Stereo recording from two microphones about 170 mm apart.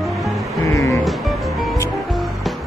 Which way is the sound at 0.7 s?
20° left (ahead or behind).